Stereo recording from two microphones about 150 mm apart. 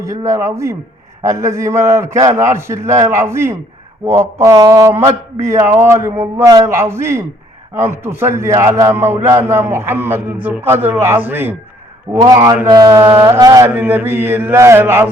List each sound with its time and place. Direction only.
0.0 s a man's voice: 20° right (ahead or behind)